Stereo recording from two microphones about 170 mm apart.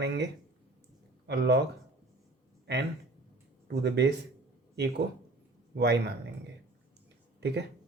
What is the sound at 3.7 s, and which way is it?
Speech, 75° right (ahead or behind).